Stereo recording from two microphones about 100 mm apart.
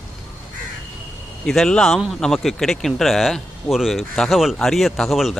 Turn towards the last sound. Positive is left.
turn(degrees=0)  # may be behind; listen again after turning